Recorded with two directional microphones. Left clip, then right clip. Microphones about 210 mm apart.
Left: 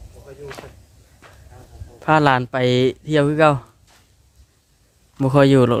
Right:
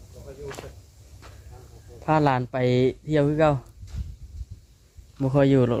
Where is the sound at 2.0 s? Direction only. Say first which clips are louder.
Left 6 dB; 25° left (ahead or behind).